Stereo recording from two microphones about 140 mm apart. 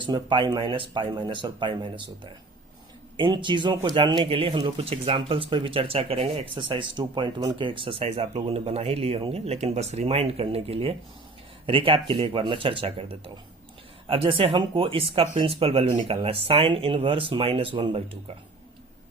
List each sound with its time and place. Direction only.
0.0 s speech: 35° right (ahead or behind)